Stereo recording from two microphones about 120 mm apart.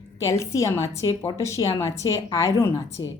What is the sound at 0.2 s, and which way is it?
A woman's voice, 25° left (ahead or behind).